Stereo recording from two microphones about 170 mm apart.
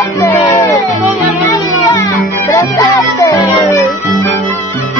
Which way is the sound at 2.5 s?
20° left (ahead or behind).